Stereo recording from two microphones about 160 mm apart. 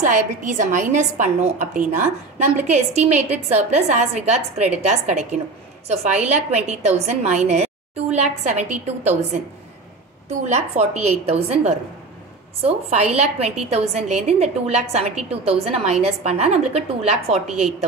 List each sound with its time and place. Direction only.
0.0 s a woman's voice: 50° right (ahead or behind)
10.4 s a woman's voice: 45° right (ahead or behind)
17.5 s a woman's voice: centre (ahead or behind)